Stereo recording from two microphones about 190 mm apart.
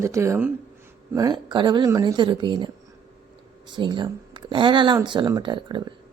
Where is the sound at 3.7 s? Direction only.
25° right (ahead or behind).